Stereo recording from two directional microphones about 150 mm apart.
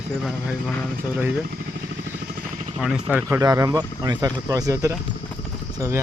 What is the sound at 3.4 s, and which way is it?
Speech, 25° right (ahead or behind).